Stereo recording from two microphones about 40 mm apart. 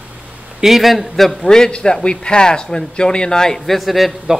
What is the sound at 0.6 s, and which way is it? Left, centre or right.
Speech, centre.